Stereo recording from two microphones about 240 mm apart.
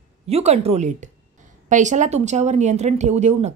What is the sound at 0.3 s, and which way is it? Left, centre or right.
A woman's voice, right.